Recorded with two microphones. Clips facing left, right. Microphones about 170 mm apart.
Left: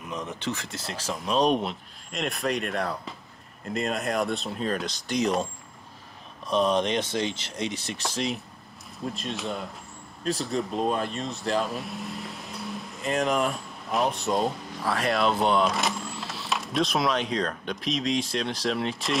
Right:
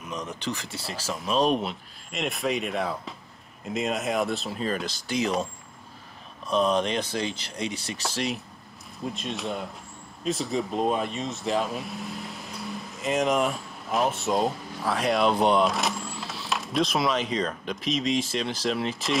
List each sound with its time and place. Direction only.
0.0 s speech: centre (ahead or behind)